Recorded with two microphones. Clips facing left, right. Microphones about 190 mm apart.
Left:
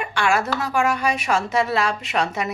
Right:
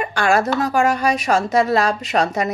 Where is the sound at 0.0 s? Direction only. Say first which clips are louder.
Right 4 dB; 40° right (ahead or behind).